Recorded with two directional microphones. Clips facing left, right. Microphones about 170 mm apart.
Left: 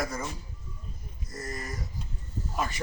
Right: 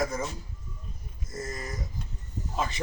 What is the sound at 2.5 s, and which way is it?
Speech, 20° right (ahead or behind).